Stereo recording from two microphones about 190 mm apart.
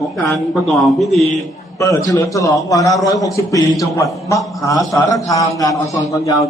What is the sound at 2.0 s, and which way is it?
A man's voice, 15° left (ahead or behind).